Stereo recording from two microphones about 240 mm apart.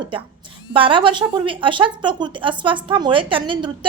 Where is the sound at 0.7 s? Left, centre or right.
Right.